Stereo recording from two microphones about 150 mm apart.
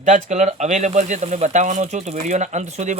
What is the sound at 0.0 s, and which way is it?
Speech, 55° right (ahead or behind).